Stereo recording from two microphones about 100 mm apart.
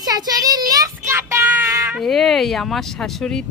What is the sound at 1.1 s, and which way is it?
Child singing, 25° right (ahead or behind).